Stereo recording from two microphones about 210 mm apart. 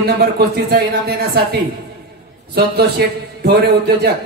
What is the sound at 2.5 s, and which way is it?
A man's voice, 50° right (ahead or behind).